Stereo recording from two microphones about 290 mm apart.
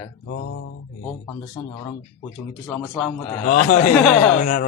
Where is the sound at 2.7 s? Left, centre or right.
Centre.